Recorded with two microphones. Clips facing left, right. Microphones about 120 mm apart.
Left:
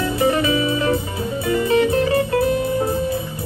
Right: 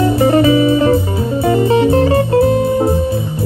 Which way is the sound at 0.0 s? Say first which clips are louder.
Right 7 dB; 35° right (ahead or behind).